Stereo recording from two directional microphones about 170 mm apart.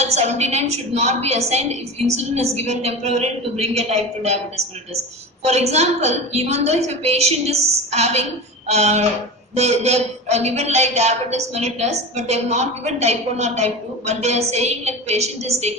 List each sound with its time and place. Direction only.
0.0 s a woman's voice: 40° right (ahead or behind)